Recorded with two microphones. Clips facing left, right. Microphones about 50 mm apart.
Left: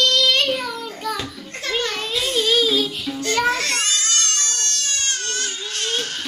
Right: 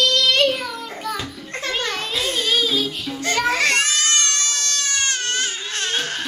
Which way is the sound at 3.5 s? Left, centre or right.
Right.